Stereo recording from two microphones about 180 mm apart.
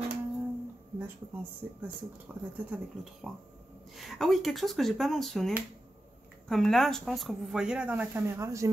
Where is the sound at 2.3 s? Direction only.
10° right (ahead or behind).